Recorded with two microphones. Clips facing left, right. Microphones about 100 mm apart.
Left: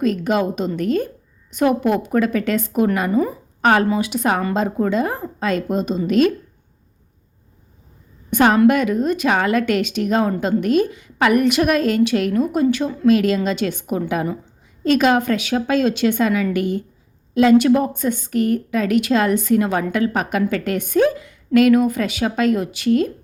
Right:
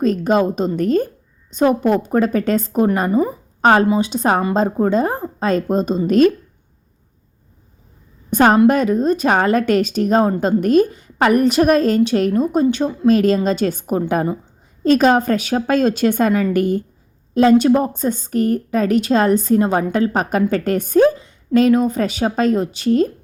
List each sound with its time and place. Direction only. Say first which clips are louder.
0.0 s a woman's voice: right 3 dB; 35° right (ahead or behind)
3.1 s a woman's voice: right 2 dB; 20° right (ahead or behind)
3.6 s a woman's voice: right 3 dB; 30° right (ahead or behind)
8.3 s a woman's voice: right 2 dB; 35° right (ahead or behind)